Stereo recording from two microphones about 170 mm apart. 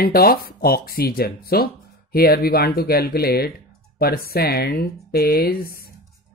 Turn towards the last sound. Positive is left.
turn(degrees=60)  # may be behind; listen again after turning